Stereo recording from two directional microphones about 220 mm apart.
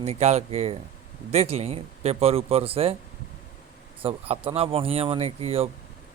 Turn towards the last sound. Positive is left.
turn(degrees=-25)  # may be behind; listen again after turning